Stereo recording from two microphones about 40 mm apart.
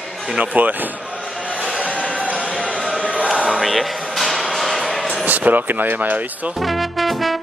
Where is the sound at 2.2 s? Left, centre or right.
Right.